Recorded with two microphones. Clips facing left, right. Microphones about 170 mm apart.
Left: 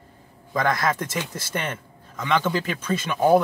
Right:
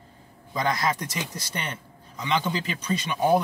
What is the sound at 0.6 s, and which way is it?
Speech, 50° left (ahead or behind).